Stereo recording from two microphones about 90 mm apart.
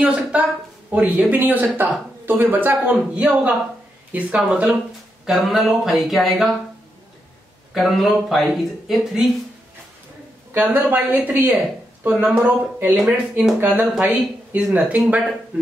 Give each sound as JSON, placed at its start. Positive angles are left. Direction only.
{"t": 0.0, "sound": "speech", "side_deg": -10}
{"t": 7.7, "sound": "speech", "side_deg": 0}
{"t": 10.5, "sound": "speech", "side_deg": -20}
{"t": 12.1, "sound": "speech", "side_deg": -5}
{"t": 12.4, "sound": "speech", "side_deg": -20}